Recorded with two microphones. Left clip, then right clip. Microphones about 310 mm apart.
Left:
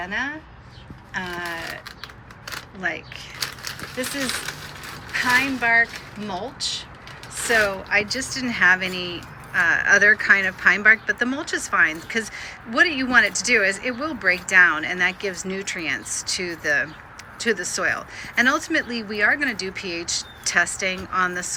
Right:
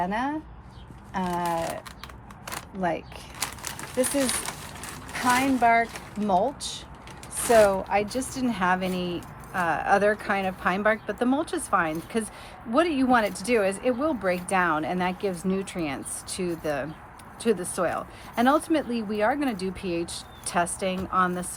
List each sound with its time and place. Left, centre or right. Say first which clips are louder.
0.0 s speech: left 1 dB; centre
2.8 s speech: left 1 dB; centre
3.3 s a sound: left 4 dB; right
4.1 s speech: even; right
5.1 s speech: left 4 dB; centre